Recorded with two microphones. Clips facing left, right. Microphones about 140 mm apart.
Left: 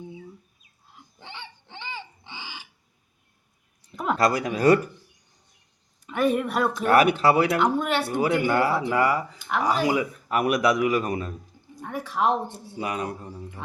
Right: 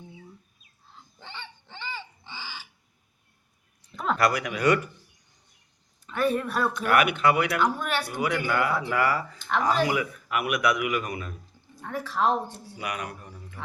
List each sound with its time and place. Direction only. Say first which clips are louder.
0.9 s a sound: left 1 dB; 15° left (ahead or behind)
3.9 s a sound: left 2 dB; 10° left (ahead or behind)
4.2 s speech: left 3 dB; 30° left (ahead or behind)
6.1 s speech: left 3 dB; 15° left (ahead or behind)
6.9 s speech: left 4 dB; 35° left (ahead or behind); by 9.9 s 10° left (ahead or behind)
9.9 s speech: left 3 dB; 30° left (ahead or behind)
11.7 s speech: left 1 dB; 15° left (ahead or behind)